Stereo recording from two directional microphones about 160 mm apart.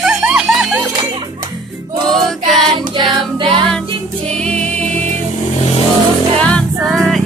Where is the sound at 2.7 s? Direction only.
30° right (ahead or behind).